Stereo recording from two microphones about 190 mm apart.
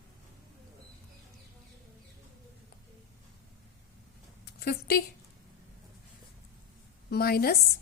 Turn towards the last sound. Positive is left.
turn(degrees=55)  # may be behind; listen again after turning